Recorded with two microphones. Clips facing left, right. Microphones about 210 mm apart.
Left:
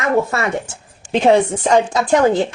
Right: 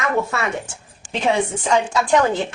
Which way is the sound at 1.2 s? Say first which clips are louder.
Left 6 dB; 40° left (ahead or behind).